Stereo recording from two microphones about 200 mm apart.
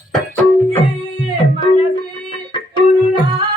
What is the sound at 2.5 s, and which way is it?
Music, 25° left (ahead or behind).